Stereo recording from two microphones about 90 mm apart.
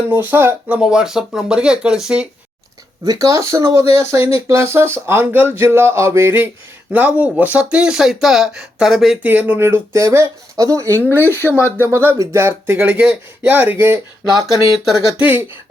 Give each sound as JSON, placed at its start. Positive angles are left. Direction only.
{"t": 0.1, "sound": "speech", "side_deg": -20}
{"t": 0.8, "sound": "speech", "side_deg": -5}
{"t": 3.0, "sound": "speech", "side_deg": -40}
{"t": 9.2, "sound": "speech", "side_deg": -20}
{"t": 11.2, "sound": "speech", "side_deg": 25}
{"t": 11.8, "sound": "speech", "side_deg": -25}
{"t": 15.2, "sound": "speech", "side_deg": -20}